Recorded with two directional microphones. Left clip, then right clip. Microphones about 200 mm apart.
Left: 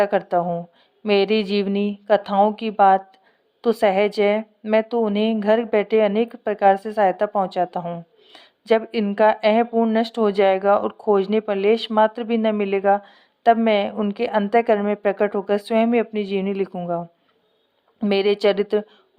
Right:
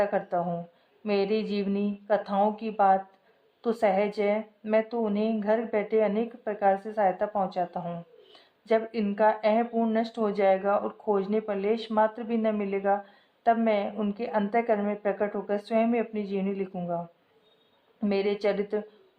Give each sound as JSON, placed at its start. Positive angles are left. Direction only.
{"t": 0.0, "sound": "speech", "side_deg": 30}
{"t": 18.0, "sound": "speech", "side_deg": 30}